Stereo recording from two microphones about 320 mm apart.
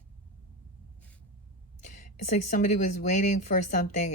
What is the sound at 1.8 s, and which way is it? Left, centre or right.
Speech, left.